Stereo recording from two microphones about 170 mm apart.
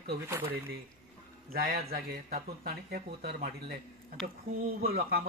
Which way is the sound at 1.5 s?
60° right (ahead or behind).